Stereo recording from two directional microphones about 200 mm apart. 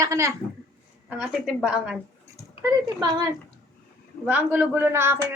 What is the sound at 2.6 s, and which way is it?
Speech, 15° right (ahead or behind).